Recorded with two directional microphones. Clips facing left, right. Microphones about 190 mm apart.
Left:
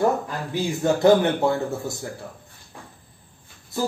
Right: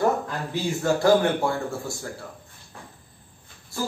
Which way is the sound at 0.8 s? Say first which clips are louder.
Left 3 dB; 20° left (ahead or behind).